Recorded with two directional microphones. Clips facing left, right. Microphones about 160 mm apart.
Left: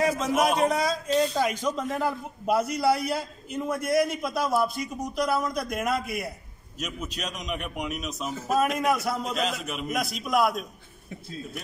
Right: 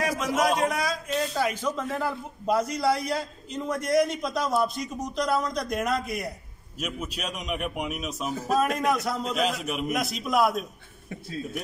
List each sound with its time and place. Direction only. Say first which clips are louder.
0.4 s a man's voice: left 1 dB; 25° left (ahead or behind); by 10.6 s centre (ahead or behind)